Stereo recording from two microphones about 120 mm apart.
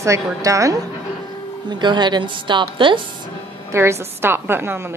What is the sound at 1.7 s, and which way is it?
A woman's voice, 40° right (ahead or behind).